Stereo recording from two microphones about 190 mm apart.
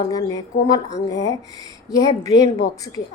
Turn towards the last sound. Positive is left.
turn(degrees=20)  # may be behind; listen again after turning